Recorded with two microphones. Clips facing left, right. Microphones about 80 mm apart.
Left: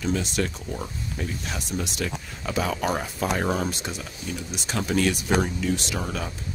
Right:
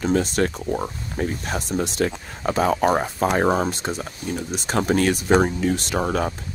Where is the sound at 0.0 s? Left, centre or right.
Right.